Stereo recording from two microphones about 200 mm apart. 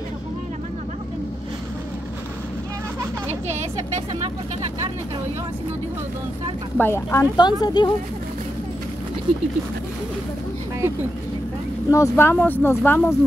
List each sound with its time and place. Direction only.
6.8 s speech: 15° left (ahead or behind)
11.9 s speech: 15° left (ahead or behind)